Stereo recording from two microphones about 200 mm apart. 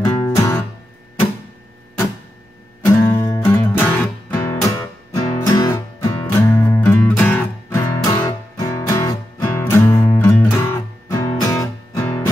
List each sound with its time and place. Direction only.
0.2 s guitar: 15° left (ahead or behind)
2.8 s music: 15° left (ahead or behind)